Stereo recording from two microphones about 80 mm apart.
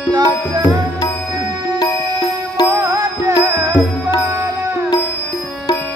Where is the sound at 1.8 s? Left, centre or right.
Left.